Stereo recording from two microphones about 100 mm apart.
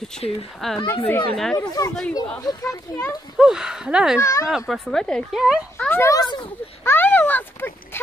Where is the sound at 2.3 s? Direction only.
35° left (ahead or behind).